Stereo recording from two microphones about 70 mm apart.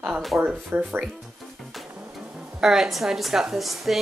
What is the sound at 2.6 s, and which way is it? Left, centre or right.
A woman's voice, centre.